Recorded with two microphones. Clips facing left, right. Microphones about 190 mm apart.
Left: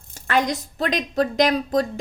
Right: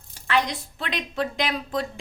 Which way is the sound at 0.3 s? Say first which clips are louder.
Left 3 dB; 45° left (ahead or behind).